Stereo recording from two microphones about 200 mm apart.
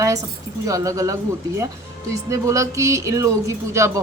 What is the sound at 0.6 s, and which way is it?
Speech, 15° right (ahead or behind).